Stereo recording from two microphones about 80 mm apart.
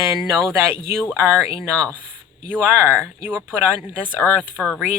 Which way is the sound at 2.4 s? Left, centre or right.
Right.